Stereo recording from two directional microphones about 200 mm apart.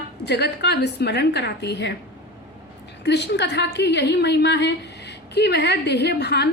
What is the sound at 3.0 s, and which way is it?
A woman's voice, 60° left (ahead or behind).